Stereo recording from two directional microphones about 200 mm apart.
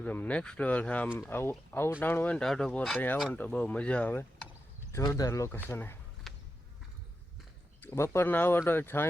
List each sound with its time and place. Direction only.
0.0 s speech: 5° left (ahead or behind)
6.3 s a sound: centre (ahead or behind)
7.8 s speech: 10° left (ahead or behind)